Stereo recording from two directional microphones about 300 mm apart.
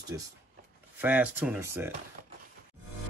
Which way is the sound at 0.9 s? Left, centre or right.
Centre.